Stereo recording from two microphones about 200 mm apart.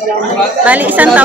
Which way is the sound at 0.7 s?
10° right (ahead or behind).